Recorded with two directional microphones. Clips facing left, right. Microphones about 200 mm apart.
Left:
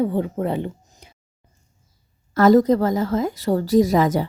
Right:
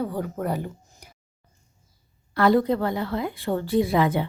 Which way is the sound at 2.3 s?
40° left (ahead or behind).